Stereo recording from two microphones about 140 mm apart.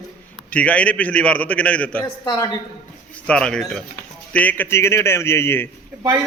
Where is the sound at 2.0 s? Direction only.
30° left (ahead or behind).